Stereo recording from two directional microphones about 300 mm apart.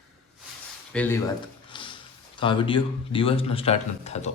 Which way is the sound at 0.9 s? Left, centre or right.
Centre.